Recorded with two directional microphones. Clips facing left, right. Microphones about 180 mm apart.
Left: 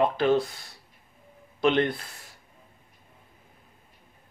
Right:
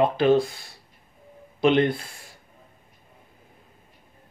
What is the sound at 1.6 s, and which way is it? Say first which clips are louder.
Speech: right 3 dB; 15° right (ahead or behind).